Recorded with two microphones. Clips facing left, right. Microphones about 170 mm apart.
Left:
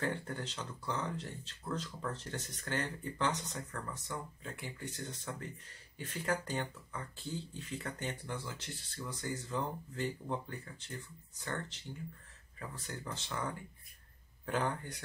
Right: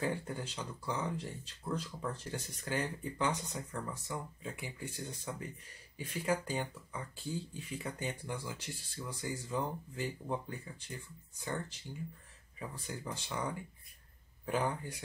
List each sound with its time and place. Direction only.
0.0 s speech: 10° right (ahead or behind)
12.5 s speech: 10° right (ahead or behind)